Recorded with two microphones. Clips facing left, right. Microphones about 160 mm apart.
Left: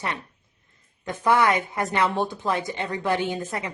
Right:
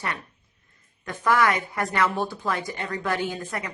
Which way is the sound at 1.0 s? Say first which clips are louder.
Left 1 dB; 20° left (ahead or behind).